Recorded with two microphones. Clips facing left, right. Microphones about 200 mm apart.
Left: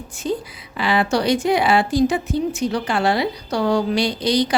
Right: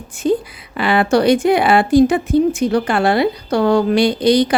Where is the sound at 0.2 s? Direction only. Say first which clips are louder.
Right 7 dB; 55° right (ahead or behind).